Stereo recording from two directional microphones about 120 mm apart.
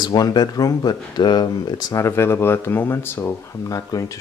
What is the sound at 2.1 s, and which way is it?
Speech, 20° left (ahead or behind).